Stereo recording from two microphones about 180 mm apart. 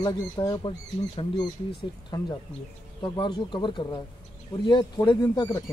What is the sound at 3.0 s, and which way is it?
Speech, 25° left (ahead or behind).